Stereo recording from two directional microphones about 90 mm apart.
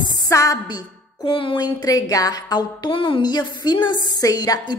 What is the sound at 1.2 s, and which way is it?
A woman's voice, 65° left (ahead or behind).